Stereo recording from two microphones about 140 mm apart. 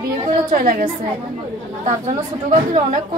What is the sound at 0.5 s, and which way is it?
Speech, 75° right (ahead or behind).